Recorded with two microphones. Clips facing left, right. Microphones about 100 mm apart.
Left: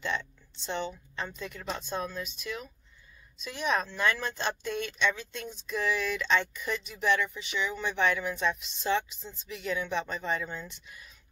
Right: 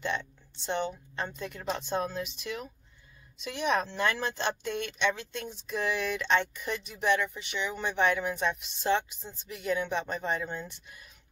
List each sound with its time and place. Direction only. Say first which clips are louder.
0.6 s speech: right 2 dB; 55° right (ahead or behind)